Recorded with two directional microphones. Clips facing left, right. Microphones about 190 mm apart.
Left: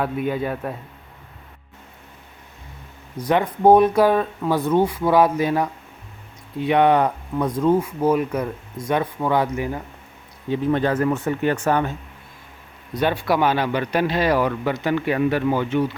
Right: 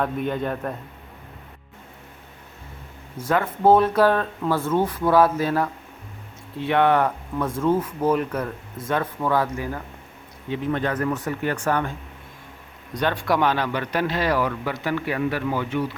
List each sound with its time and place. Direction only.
0.0 s a man's voice: 5° left (ahead or behind)
3.2 s a man's voice: 15° left (ahead or behind)
10.5 s speech: 30° left (ahead or behind)
12.9 s a man's voice: 5° left (ahead or behind); by 15.8 s 25° left (ahead or behind)